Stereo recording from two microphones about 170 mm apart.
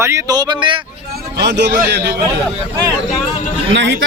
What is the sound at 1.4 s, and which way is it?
Speech, 85° right.